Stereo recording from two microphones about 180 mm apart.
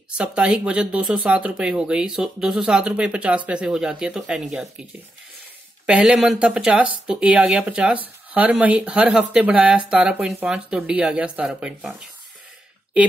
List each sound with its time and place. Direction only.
0.2 s speech: 5° right (ahead or behind)